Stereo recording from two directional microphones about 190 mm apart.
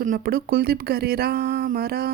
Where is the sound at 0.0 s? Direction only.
45° right (ahead or behind).